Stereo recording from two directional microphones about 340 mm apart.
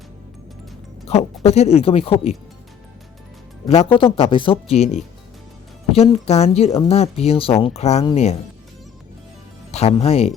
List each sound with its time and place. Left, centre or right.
1.0 s speech: centre
3.7 s speech: centre
5.9 s speech: centre
9.7 s speech: centre